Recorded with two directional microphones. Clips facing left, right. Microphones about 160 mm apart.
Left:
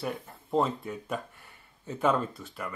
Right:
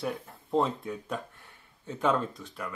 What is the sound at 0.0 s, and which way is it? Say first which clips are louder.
Speech: right 1 dB; centre (ahead or behind).